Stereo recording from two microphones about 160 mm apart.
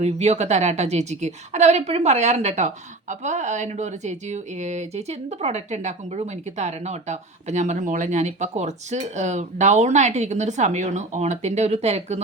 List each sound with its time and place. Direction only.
0.0 s a woman's voice: 40° right (ahead or behind)